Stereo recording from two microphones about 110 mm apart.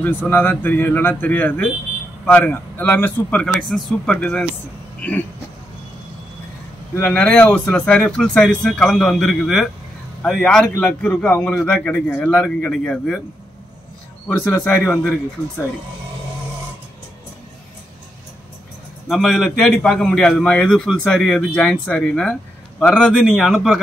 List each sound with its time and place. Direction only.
0.0 s a man's voice: 15° left (ahead or behind)
3.4 s a man's voice: 5° left (ahead or behind)
7.0 s a man's voice: 15° left (ahead or behind)
14.2 s a man's voice: 15° left (ahead or behind)
19.0 s a man's voice: centre (ahead or behind)